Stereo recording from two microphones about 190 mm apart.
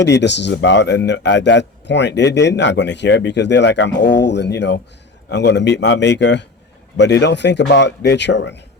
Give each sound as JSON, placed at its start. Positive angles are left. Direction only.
{"t": 0.0, "sound": "a man's voice", "side_deg": 65}